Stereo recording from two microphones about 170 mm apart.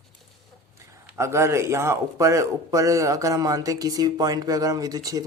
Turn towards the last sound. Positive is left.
turn(degrees=-20)  # may be behind; listen again after turning